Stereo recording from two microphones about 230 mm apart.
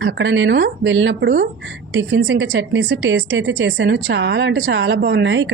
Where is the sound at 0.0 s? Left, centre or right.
Right.